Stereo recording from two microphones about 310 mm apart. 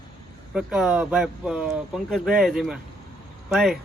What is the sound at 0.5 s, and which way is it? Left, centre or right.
Speech, centre.